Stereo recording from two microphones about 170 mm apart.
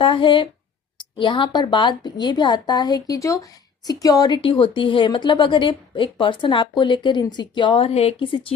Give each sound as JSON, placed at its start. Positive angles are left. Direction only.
{"t": 0.0, "sound": "speech", "side_deg": 30}